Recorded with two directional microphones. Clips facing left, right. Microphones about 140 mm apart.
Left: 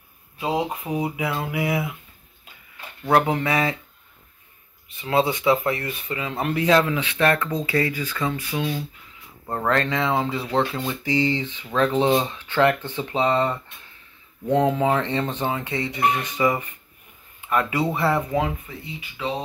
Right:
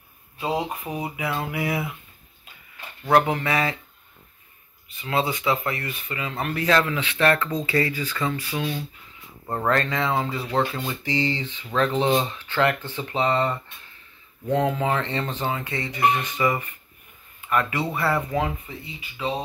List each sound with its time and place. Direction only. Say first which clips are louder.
0.4 s speech: left 2 dB; 10° left (ahead or behind)
3.4 s speech: left 2 dB; 15° left (ahead or behind)
5.0 s speech: left 4 dB; 25° left (ahead or behind)
9.5 s speech: left 1 dB; 5° right (ahead or behind)
11.1 s speech: left 4 dB; 15° left (ahead or behind)